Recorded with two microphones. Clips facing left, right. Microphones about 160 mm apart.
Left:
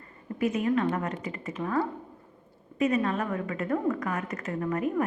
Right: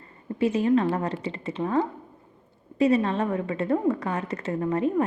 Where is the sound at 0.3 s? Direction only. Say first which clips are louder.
Right 4 dB; 30° right (ahead or behind).